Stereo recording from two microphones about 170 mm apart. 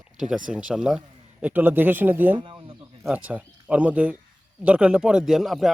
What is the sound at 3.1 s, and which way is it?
A man's voice, 10° right (ahead or behind).